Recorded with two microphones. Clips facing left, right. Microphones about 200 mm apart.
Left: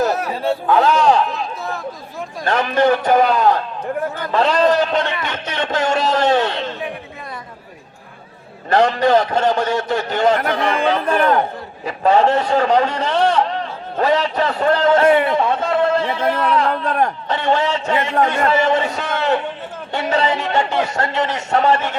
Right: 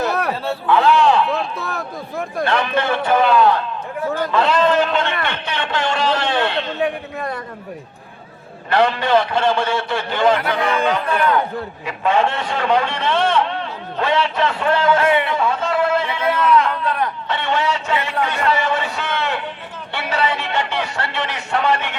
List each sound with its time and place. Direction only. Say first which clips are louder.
0.7 s a man's voice: even; 40° left (ahead or behind)
2.4 s a man's voice: left 4 dB; 40° left (ahead or behind)
6.8 s a man's voice: right 6 dB; 65° right (ahead or behind)
8.7 s a man's voice: left 2 dB; 40° left (ahead or behind)